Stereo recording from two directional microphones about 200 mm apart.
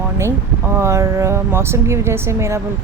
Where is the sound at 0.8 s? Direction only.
15° right (ahead or behind).